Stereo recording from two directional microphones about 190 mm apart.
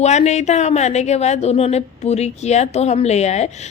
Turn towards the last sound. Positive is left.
turn(degrees=35)  # may be behind; listen again after turning